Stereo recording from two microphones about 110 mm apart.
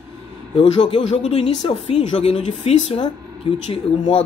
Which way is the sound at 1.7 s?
70° left (ahead or behind).